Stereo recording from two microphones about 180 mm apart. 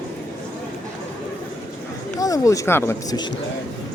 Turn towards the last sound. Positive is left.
turn(degrees=15)  # may be behind; listen again after turning